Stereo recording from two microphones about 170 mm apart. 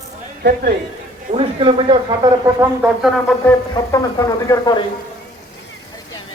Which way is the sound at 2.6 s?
10° right (ahead or behind).